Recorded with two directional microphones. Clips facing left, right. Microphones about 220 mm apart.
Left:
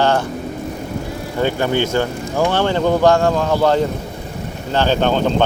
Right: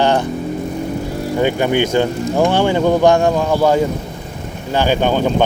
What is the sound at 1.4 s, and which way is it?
Speech, 15° right (ahead or behind).